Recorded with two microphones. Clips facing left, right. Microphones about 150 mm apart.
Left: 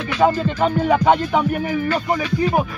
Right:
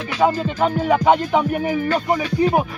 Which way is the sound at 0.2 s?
5° right (ahead or behind).